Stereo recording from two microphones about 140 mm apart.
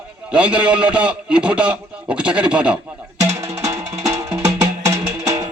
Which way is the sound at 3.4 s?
20° right (ahead or behind).